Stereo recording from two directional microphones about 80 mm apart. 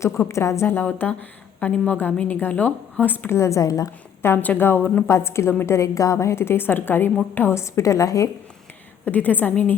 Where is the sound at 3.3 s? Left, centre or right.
Left.